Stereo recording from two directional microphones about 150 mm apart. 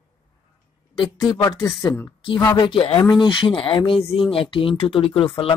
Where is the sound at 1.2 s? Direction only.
25° left (ahead or behind).